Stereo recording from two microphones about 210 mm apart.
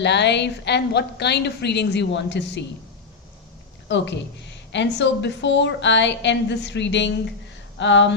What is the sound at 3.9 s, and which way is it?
A woman's voice, 60° left (ahead or behind).